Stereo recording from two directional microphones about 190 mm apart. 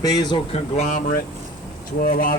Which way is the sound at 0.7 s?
40° left (ahead or behind).